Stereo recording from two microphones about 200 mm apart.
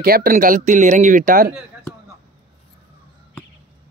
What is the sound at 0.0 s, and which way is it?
Speech, 45° right (ahead or behind).